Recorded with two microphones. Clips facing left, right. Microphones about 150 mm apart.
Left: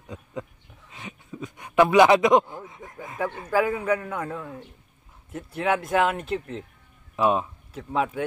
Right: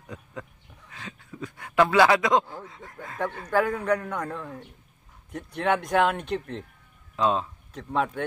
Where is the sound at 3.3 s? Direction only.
5° left (ahead or behind).